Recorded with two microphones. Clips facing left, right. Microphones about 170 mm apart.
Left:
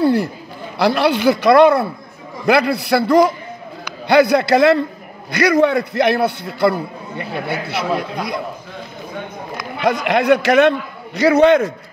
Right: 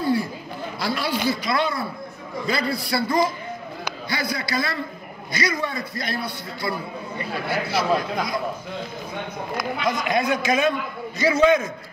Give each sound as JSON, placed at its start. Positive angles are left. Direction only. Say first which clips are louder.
{"t": 0.0, "sound": "a man's voice", "louder": "left 7 dB", "side_deg": 75}
{"t": 9.8, "sound": "a man's voice", "louder": "left 9 dB", "side_deg": 70}